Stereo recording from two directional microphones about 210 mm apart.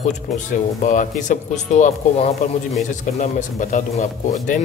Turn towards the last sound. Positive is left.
turn(degrees=40)  # may be behind; listen again after turning